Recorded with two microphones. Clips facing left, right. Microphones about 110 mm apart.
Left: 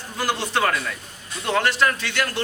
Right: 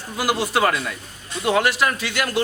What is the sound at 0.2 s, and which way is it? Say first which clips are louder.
A man's voice: right 3 dB; 10° right (ahead or behind).